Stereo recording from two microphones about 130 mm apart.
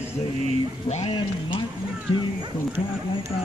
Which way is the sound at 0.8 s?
55° left (ahead or behind).